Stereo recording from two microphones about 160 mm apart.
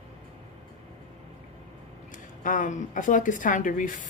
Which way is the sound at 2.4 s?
55° left (ahead or behind).